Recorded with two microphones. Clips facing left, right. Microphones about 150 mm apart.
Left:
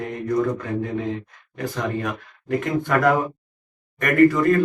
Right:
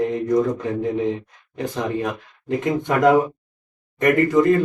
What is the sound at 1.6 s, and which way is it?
Speech, 20° right (ahead or behind).